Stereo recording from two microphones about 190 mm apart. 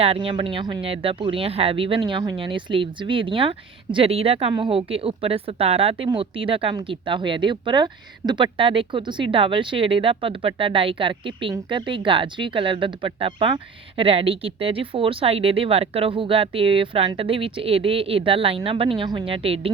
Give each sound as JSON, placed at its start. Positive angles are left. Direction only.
{"t": 0.0, "sound": "speech", "side_deg": -30}